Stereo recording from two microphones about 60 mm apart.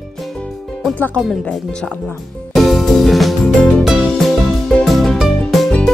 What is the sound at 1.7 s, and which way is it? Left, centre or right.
Music, centre.